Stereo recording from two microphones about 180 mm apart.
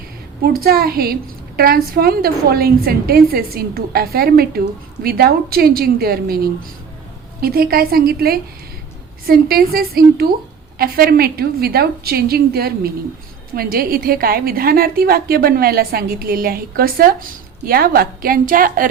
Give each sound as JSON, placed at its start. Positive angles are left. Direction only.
{"t": 0.6, "sound": "a woman's voice", "side_deg": -60}